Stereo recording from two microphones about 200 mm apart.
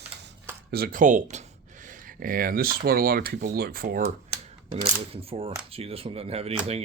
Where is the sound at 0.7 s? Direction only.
45° right (ahead or behind).